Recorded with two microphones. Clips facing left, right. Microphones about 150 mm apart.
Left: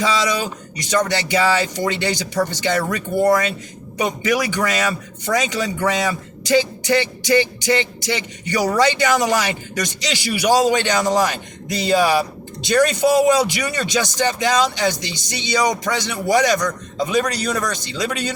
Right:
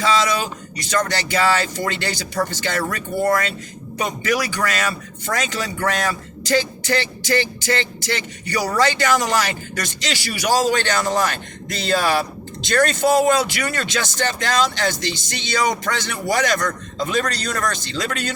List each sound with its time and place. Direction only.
0.8 s speech: 15° left (ahead or behind)